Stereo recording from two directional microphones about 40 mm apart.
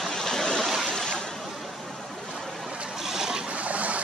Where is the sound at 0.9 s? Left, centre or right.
Centre.